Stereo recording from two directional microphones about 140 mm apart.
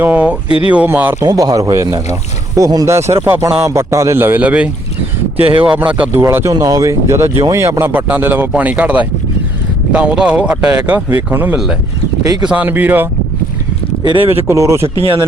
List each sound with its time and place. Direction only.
0.0 s speech: 10° right (ahead or behind)
5.4 s speech: 40° right (ahead or behind)
6.1 s speech: 20° right (ahead or behind)
14.0 s speech: 35° right (ahead or behind)
14.4 s speech: 20° right (ahead or behind)
14.8 s speech: 40° right (ahead or behind)